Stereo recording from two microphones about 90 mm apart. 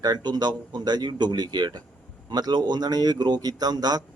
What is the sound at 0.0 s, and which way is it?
Speech, 50° right (ahead or behind).